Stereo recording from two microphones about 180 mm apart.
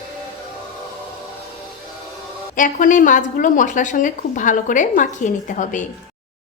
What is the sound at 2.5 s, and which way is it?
A woman's voice, 45° left (ahead or behind).